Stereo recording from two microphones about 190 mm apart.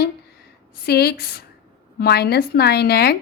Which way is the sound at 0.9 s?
55° left (ahead or behind).